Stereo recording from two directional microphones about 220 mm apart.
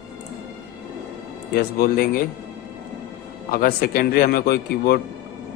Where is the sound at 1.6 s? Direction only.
40° left (ahead or behind).